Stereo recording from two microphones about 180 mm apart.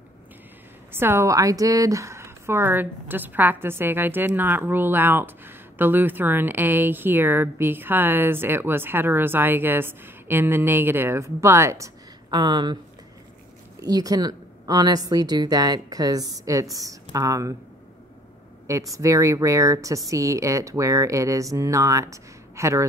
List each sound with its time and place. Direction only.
0.9 s a woman's voice: 15° right (ahead or behind)
13.7 s a woman's voice: 20° right (ahead or behind)
18.7 s a woman's voice: 15° right (ahead or behind)